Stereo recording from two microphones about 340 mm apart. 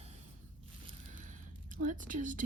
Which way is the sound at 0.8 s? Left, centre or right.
Right.